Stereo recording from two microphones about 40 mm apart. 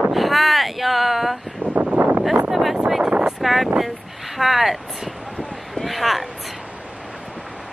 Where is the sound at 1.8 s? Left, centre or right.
Right.